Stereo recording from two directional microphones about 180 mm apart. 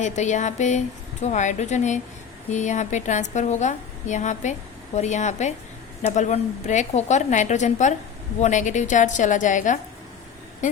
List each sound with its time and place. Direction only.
0.0 s a woman's voice: 40° left (ahead or behind)